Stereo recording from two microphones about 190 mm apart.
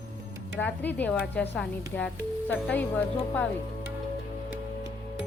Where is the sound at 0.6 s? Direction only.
10° left (ahead or behind).